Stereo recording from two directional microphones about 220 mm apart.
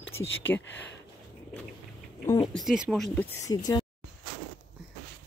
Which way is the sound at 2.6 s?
Centre (ahead or behind).